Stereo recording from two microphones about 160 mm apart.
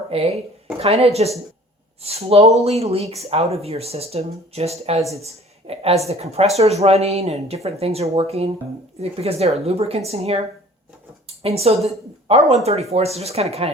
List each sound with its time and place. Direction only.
0.1 s speech: 40° right (ahead or behind)
11.4 s speech: 40° right (ahead or behind)